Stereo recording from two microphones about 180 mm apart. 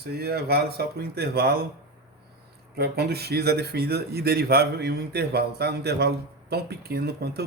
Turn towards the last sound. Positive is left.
turn(degrees=-65)  # may be behind; listen again after turning